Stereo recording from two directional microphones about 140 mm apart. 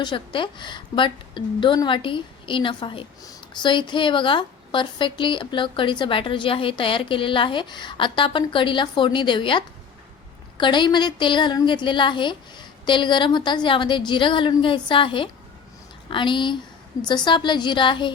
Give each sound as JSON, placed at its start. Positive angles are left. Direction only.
{"t": 0.0, "sound": "a woman's voice", "side_deg": 35}